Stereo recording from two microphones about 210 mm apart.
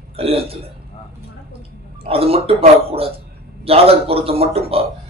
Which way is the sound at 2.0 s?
25° right (ahead or behind).